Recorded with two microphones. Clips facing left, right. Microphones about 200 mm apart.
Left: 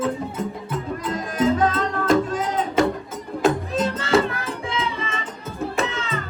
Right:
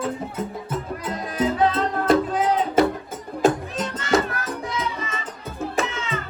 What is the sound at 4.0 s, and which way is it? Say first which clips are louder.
Music: right 1 dB; 30° left (ahead or behind).